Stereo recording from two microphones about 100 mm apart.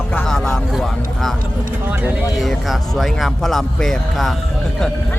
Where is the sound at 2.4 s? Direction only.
Centre (ahead or behind).